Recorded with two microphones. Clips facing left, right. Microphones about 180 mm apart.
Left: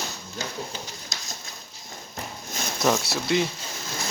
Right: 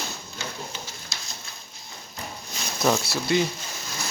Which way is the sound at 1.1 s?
45° left (ahead or behind).